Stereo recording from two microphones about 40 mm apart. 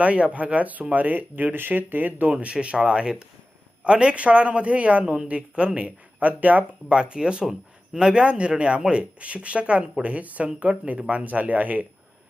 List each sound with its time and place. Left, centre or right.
0.0 s speech: right
2.3 s speech: right
5.0 s a woman's voice: centre
5.3 s speech: right
6.8 s speech: right